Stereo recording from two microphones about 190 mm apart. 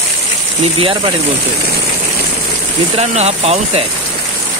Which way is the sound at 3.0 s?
35° right (ahead or behind).